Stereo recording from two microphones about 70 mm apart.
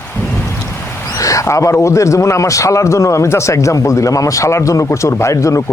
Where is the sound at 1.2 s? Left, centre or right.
Left.